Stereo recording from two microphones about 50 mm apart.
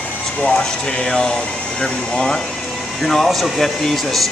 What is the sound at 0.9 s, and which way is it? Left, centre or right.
Speech, centre.